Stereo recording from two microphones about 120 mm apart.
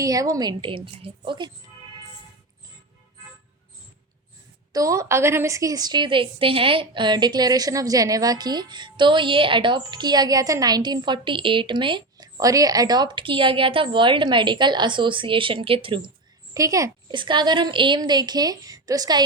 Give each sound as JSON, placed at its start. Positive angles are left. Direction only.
{"t": 0.0, "sound": "a woman's voice", "side_deg": -30}
{"t": 0.6, "sound": "a woman's voice", "side_deg": -45}
{"t": 4.7, "sound": "a woman's voice", "side_deg": -25}
{"t": 16.6, "sound": "a woman's voice", "side_deg": -30}
{"t": 17.1, "sound": "a woman's voice", "side_deg": -40}